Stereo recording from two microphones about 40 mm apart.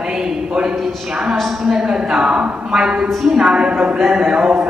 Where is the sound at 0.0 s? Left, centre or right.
Centre.